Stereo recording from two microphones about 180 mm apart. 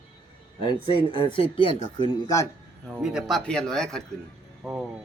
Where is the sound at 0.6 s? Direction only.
25° left (ahead or behind).